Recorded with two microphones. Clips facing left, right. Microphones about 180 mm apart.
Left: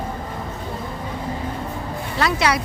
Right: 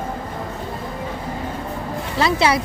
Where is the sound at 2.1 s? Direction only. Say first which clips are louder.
Right 2 dB; 25° right (ahead or behind).